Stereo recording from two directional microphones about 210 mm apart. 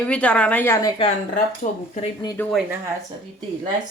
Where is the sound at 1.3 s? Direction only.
35° left (ahead or behind).